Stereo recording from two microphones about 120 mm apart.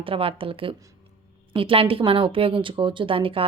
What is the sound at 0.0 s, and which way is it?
Speech, 50° right (ahead or behind).